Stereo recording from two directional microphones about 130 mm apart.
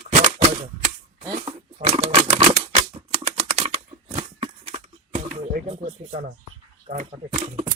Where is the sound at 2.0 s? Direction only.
60° right (ahead or behind).